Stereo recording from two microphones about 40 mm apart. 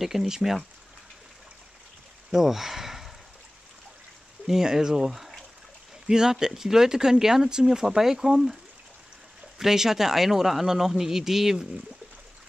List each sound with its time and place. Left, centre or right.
0.0 s speech: centre
2.3 s speech: centre
4.5 s speech: centre
9.6 s speech: centre